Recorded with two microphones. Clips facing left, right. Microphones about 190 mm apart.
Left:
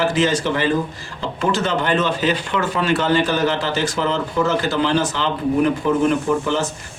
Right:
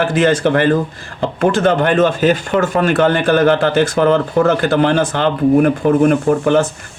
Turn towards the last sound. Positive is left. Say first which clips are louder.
# right 7 dB
turn(degrees=-55)  # may be behind; listen again after turning